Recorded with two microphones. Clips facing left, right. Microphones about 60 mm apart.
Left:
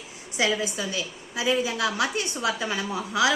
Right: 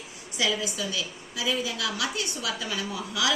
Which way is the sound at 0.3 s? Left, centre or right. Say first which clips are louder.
Left 3 dB; left.